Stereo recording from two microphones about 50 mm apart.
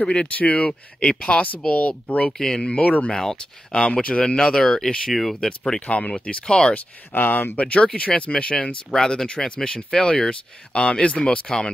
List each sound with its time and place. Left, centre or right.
0.0 s speech: centre
0.3 s speech: left
0.7 s speech: centre
2.3 s speech: centre
2.8 s speech: left
3.2 s speech: centre
3.8 s speech: left; by 5.5 s centre
5.8 s speech: left
6.7 s speech: left
7.6 s speech: left